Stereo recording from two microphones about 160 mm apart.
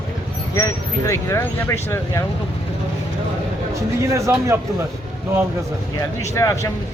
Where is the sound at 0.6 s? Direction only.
20° left (ahead or behind).